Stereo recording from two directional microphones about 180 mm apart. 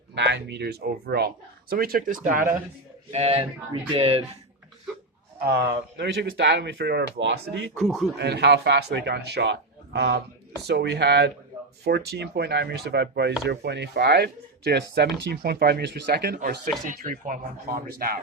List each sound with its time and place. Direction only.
0.1 s speech: 70° right (ahead or behind); by 2.5 s 50° right (ahead or behind)
3.1 s a sound: 35° right (ahead or behind)
5.5 s speech: 65° right (ahead or behind); by 7.7 s 80° right
7.8 s a man's voice: centre (ahead or behind)
8.1 s speech: 65° right (ahead or behind)
17.0 s speech: 50° right (ahead or behind)